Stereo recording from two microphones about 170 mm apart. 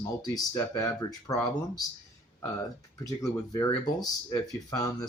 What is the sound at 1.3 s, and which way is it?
Speech, 20° left (ahead or behind).